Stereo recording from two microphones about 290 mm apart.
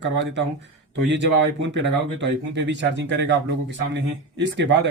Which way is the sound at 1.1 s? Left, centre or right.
Right.